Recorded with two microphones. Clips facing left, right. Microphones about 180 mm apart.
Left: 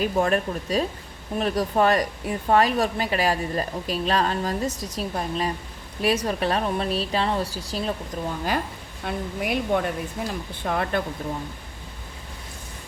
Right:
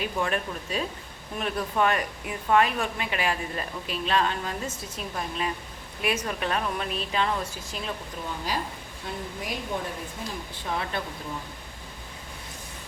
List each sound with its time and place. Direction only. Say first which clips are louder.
0.0 s speech: left 6 dB; 40° left (ahead or behind)
9.0 s a woman's voice: left 7 dB; 65° left (ahead or behind)
10.7 s speech: left 6 dB; 55° left (ahead or behind)